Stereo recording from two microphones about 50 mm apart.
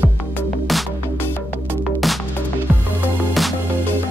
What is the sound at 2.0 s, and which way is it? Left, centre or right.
Music, centre.